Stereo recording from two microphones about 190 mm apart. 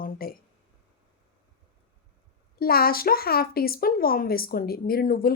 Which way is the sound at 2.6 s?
50° left (ahead or behind).